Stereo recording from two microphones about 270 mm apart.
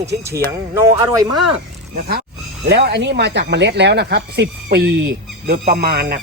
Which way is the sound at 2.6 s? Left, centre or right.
Right.